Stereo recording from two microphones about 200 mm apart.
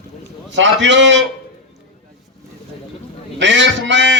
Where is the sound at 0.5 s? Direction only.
65° right (ahead or behind).